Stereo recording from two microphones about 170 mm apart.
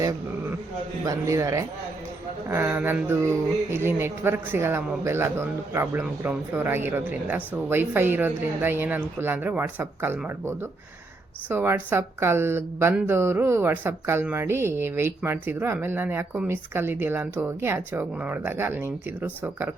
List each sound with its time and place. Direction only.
1.0 s a woman's voice: 20° right (ahead or behind)